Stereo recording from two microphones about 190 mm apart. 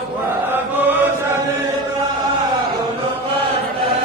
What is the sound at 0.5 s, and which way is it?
Chant, 10° right (ahead or behind).